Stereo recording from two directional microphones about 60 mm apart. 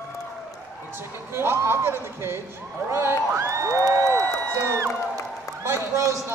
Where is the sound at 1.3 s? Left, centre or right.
Right.